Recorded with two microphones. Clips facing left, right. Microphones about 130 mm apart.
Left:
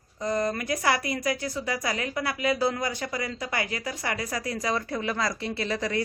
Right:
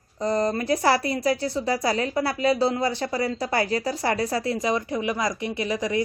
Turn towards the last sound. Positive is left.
turn(degrees=-15)  # may be behind; listen again after turning